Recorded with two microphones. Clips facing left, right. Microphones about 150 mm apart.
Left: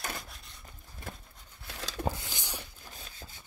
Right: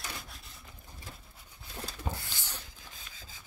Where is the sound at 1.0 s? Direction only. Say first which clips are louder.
Left 6 dB; 55° left (ahead or behind).